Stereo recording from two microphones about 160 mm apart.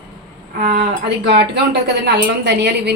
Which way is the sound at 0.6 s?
60° right (ahead or behind).